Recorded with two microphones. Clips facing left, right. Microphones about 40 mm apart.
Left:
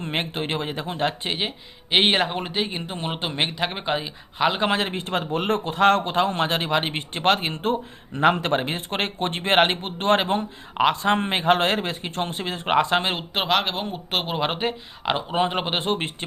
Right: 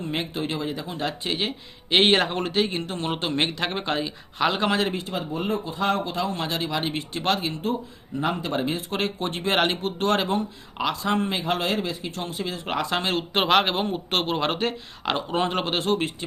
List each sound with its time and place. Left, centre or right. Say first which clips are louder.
0.0 s speech: left 1 dB; left
1.4 s speech: even; centre
4.6 s a man's voice: even; left
5.0 s speech: left 4 dB; left
13.3 s speech: right 3 dB; centre; by 16.1 s left